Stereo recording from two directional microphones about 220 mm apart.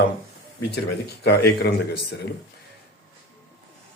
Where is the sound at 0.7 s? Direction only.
50° left (ahead or behind).